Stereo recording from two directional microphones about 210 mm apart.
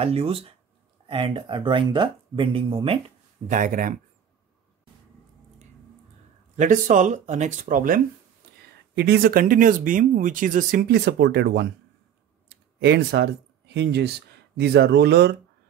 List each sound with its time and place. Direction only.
0.0 s speech: 25° right (ahead or behind)
3.4 s speech: 40° right (ahead or behind)
6.5 s speech: 40° right (ahead or behind)
8.9 s speech: 50° right (ahead or behind)
12.4 s a sound: 50° right (ahead or behind)
13.7 s speech: 55° right (ahead or behind)